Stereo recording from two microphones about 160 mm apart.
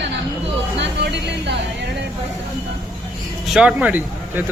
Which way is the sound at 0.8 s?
90° right.